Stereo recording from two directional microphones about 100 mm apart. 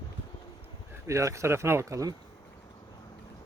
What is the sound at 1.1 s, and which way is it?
Speech, 30° right (ahead or behind).